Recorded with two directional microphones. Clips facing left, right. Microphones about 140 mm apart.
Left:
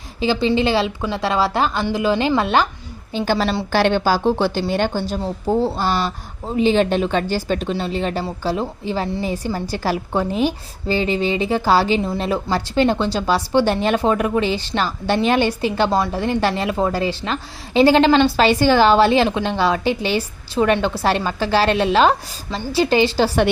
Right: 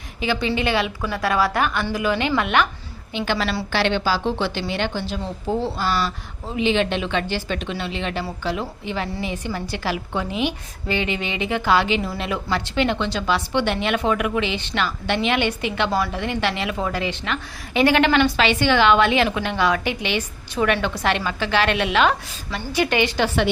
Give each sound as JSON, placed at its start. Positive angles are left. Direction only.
{"t": 0.2, "sound": "a woman's voice", "side_deg": 30}